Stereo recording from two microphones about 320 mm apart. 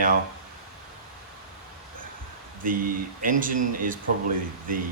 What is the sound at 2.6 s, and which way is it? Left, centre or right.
Speech, right.